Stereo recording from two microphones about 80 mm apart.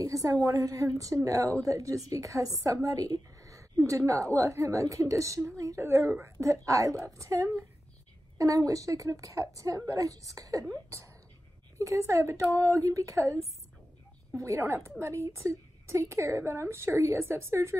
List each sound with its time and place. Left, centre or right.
0.0 s a woman's voice: right
6.4 s a woman's voice: right
11.8 s a woman's voice: right